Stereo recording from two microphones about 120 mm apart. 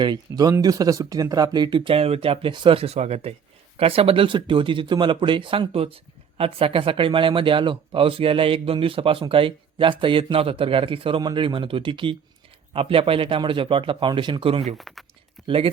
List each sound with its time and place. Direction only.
0.0 s speech: 35° right (ahead or behind)
14.8 s speech: centre (ahead or behind)
15.4 s speech: 50° right (ahead or behind)